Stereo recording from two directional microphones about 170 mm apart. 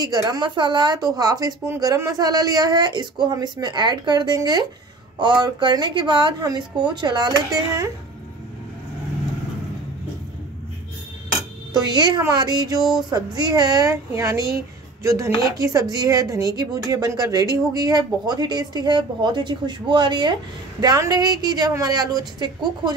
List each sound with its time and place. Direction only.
0.0 s speech: 25° right (ahead or behind)
11.7 s speech: 25° right (ahead or behind)
15.0 s chopping: 15° right (ahead or behind)
15.5 s speech: 20° right (ahead or behind)